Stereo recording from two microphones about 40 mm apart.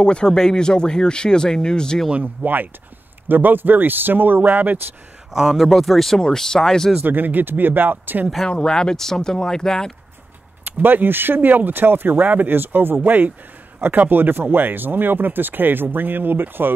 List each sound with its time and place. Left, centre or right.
0.0 s speech: left
2.4 s speech: right
4.4 s speech: right
5.3 s speech: centre
5.6 s speech: centre
7.0 s speech: right
8.5 s speech: centre
10.6 s speech: right
12.4 s speech: right
13.0 s speech: right